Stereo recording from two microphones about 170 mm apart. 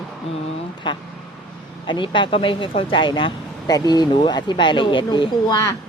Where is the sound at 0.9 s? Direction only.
30° left (ahead or behind).